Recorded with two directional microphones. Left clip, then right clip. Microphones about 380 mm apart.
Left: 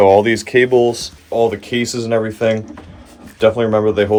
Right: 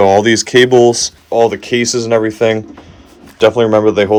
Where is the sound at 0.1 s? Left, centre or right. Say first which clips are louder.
Right 2 dB; centre.